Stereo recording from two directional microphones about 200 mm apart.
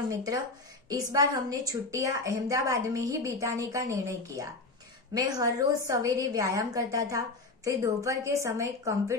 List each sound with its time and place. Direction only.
0.1 s a woman's voice: 20° right (ahead or behind)